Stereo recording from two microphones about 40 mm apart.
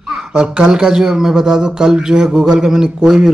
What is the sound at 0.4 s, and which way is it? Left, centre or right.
A man's voice, centre.